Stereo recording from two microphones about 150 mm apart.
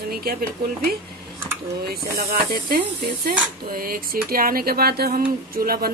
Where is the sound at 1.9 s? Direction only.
90° right.